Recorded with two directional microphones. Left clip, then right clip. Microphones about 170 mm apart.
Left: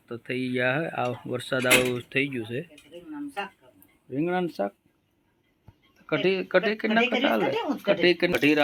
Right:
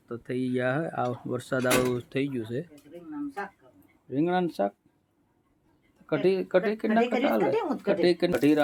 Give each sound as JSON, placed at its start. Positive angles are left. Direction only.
{"t": 0.2, "sound": "speech", "side_deg": -10}
{"t": 4.1, "sound": "speech", "side_deg": -5}
{"t": 6.1, "sound": "speech", "side_deg": -5}